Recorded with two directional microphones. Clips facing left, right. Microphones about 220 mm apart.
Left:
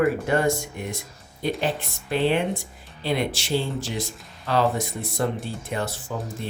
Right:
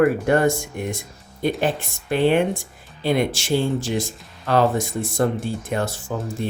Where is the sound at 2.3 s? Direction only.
50° right (ahead or behind).